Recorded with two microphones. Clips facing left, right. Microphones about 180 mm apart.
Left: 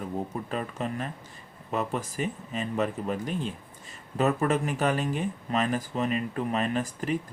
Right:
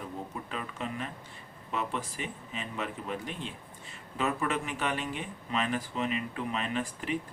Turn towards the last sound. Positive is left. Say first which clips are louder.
# left 4 dB
turn(degrees=40)  # may be behind; listen again after turning